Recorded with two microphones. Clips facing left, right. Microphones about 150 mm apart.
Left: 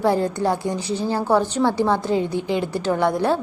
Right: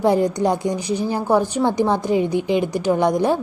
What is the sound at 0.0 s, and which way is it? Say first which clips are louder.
A woman's voice: right 2 dB; 15° right (ahead or behind).